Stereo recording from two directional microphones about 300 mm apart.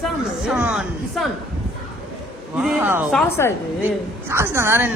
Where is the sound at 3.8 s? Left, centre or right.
Centre.